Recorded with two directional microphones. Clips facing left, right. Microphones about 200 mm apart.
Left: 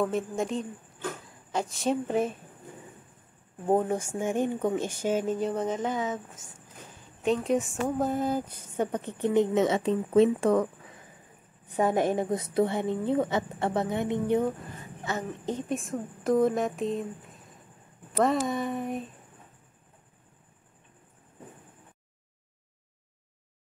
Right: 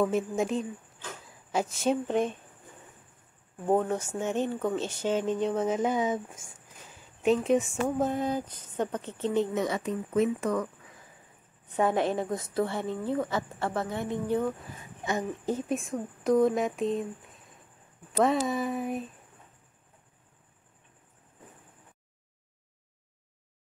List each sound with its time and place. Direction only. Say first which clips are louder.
0.0 s speech: right 2 dB; centre (ahead or behind)
3.6 s speech: left 1 dB; 10° left (ahead or behind)
5.8 s speech: right 3 dB; 15° right (ahead or behind)
7.2 s speech: right 2 dB; centre (ahead or behind); by 10.7 s 30° left (ahead or behind)
12.0 s a woman's voice: left 2 dB; 15° left (ahead or behind)
15.0 s speech: right 2 dB; 10° right (ahead or behind)